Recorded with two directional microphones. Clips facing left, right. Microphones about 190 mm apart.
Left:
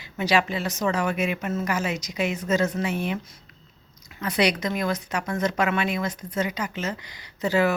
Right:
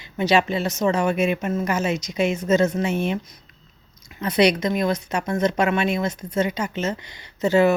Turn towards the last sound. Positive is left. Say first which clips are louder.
# right 5 dB
turn(degrees=-25)  # may be behind; listen again after turning